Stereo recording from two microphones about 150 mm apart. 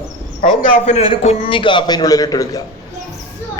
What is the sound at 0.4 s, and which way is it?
A man's voice, 50° left (ahead or behind).